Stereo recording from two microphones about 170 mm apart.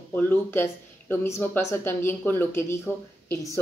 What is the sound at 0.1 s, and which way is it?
Speech, 10° left (ahead or behind).